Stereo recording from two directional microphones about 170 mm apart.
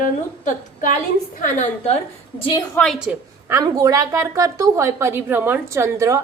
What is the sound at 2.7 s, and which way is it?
Speech, 5° left (ahead or behind).